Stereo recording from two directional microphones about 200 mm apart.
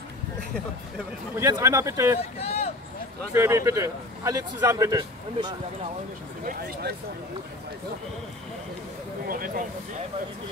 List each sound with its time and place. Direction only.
1.4 s a man's voice: 15° right (ahead or behind)
2.3 s speech: 30° left (ahead or behind)
3.3 s a man's voice: 15° right (ahead or behind)
6.4 s speech: 45° right (ahead or behind)
9.3 s speech: 45° right (ahead or behind)